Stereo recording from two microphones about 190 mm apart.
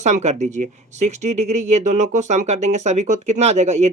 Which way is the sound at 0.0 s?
35° right (ahead or behind).